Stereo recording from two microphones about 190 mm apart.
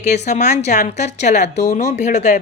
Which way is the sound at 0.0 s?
35° left (ahead or behind).